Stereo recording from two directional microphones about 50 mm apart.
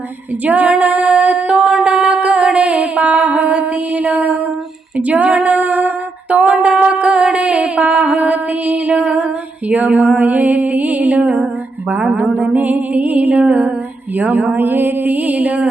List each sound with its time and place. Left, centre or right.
0.4 s female singing: right
1.8 s music: right
4.9 s speech: right
6.3 s a sound: right
11.9 s speech: right
12.4 s a sound: right
14.2 s speech: right